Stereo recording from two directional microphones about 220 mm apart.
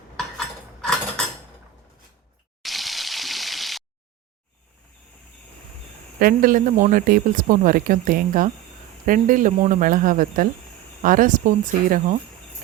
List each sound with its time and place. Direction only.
0.2 s cutlery: 5° left (ahead or behind)
2.6 s water: centre (ahead or behind)
6.1 s speech: 40° right (ahead or behind)